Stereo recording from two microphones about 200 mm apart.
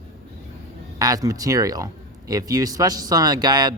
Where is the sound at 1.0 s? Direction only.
15° right (ahead or behind).